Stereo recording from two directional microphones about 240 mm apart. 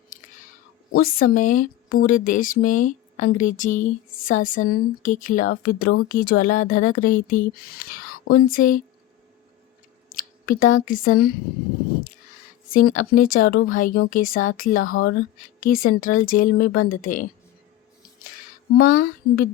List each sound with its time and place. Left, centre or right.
1.0 s speech: left
8.1 s a sound: left
8.4 s speech: left
10.2 s a sound: left
10.8 s speech: left
12.7 s speech: left
18.7 s speech: left